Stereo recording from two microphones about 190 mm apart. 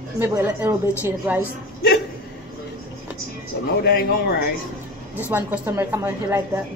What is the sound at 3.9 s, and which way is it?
Speech, 50° left (ahead or behind).